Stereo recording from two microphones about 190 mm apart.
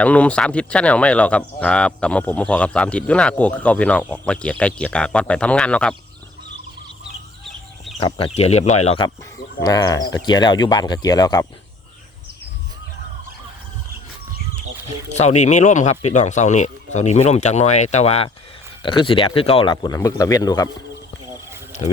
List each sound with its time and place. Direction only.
0.0 s speech: 5° left (ahead or behind)
7.9 s speech: 30° left (ahead or behind)
9.6 s speech: 20° left (ahead or behind)
15.1 s speech: 35° left (ahead or behind); by 20.7 s 20° left (ahead or behind)